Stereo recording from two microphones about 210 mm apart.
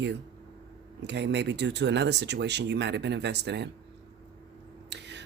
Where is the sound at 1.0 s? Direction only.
55° right (ahead or behind).